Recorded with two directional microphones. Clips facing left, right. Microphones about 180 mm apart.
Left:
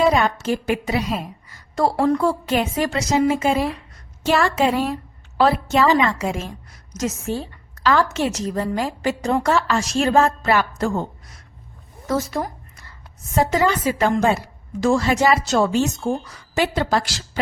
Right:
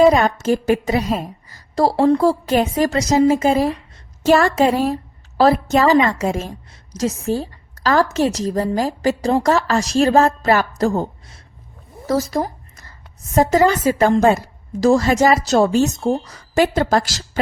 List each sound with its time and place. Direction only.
0.0 s a woman's voice: 45° right (ahead or behind)
12.0 s a sound: 35° right (ahead or behind)
13.3 s a woman's voice: 45° right (ahead or behind)